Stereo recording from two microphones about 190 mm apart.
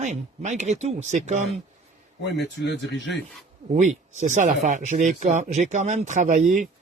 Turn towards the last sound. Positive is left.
turn(degrees=-40)  # may be behind; listen again after turning